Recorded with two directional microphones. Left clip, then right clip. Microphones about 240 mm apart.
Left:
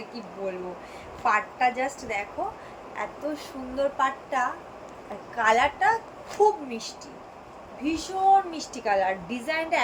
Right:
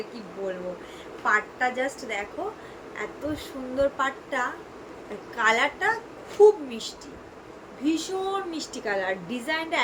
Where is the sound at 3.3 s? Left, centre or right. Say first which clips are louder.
Right 2 dB; centre.